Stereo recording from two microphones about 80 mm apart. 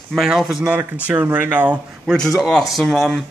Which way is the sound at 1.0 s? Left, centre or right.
Centre.